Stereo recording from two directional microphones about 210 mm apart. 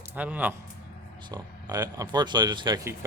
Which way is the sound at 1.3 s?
20° right (ahead or behind).